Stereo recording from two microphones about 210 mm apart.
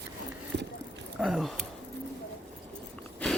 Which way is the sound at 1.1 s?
Centre (ahead or behind).